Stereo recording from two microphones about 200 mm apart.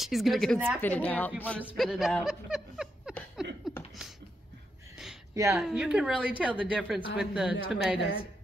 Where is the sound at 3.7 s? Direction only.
Centre (ahead or behind).